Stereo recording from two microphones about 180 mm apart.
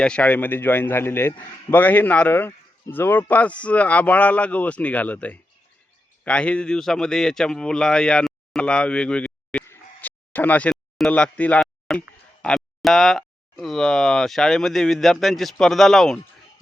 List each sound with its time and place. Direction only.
0.0 s a man's voice: 5° left (ahead or behind)